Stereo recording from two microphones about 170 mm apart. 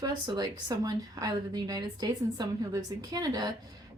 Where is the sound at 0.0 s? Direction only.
25° right (ahead or behind).